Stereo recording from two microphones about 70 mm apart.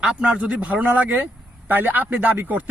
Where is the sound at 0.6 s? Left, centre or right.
Right.